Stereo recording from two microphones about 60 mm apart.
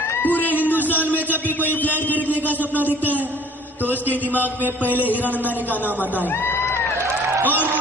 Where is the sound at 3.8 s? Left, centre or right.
Right.